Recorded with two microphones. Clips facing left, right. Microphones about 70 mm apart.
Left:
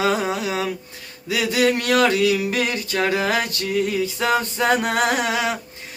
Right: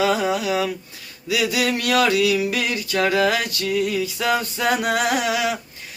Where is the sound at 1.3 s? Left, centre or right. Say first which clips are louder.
Left 2 dB; left.